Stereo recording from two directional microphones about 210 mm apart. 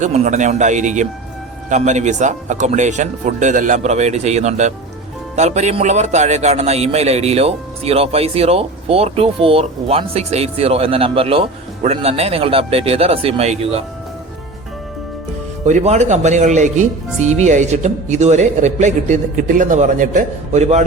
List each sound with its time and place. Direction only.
0.0 s a man's voice: 35° right (ahead or behind)
15.6 s speech: 35° right (ahead or behind)